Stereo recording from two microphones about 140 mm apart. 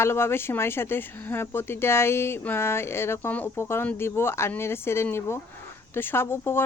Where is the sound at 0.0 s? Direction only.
15° left (ahead or behind).